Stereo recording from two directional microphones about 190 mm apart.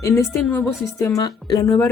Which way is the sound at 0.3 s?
5° left (ahead or behind).